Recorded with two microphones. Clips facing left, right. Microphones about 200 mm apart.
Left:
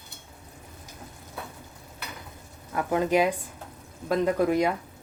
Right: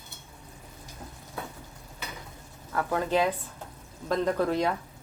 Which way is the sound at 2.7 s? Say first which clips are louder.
Left 3 dB; 20° left (ahead or behind).